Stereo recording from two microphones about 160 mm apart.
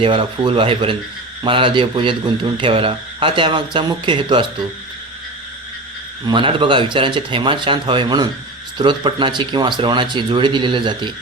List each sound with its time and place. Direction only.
0.0 s a man's voice: 35° right (ahead or behind)
6.2 s a man's voice: 30° right (ahead or behind)